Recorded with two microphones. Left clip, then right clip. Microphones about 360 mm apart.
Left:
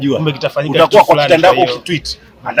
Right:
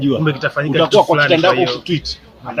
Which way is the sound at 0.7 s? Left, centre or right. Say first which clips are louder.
Left 5 dB; left.